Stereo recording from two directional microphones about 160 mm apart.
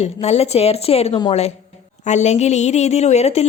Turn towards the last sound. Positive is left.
turn(degrees=40)  # may be behind; listen again after turning